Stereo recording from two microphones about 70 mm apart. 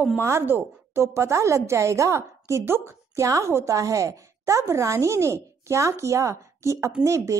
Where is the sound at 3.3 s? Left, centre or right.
Right.